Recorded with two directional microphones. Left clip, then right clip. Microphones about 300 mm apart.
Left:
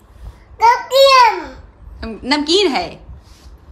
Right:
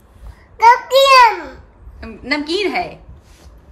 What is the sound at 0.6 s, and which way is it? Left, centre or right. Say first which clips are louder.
Child singing: right 1 dB; centre.